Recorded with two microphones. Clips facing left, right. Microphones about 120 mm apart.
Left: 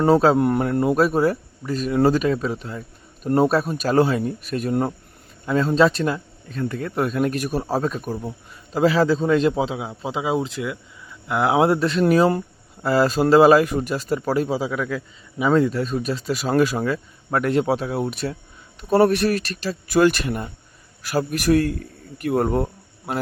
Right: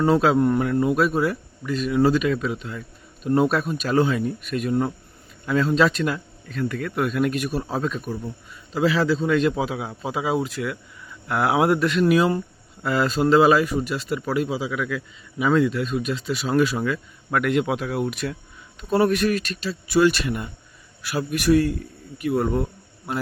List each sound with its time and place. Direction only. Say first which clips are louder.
0.1 s speech: left 4 dB; 35° left (ahead or behind)
0.3 s speech: even; 55° left (ahead or behind)
0.8 s speech: left 2 dB; 45° left (ahead or behind)
15.4 s speech: left 2 dB; 25° left (ahead or behind)
15.6 s a man's voice: left 1 dB; 40° left (ahead or behind)